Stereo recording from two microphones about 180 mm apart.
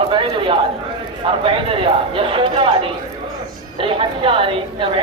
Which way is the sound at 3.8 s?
30° right (ahead or behind).